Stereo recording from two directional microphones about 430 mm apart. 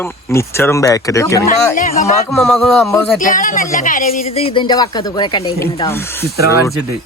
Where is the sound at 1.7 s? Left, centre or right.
Centre.